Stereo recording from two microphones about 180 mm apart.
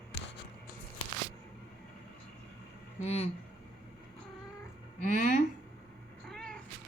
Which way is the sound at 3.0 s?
35° left (ahead or behind).